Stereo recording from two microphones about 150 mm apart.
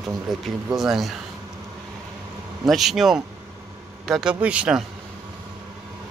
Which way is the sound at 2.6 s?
Centre (ahead or behind).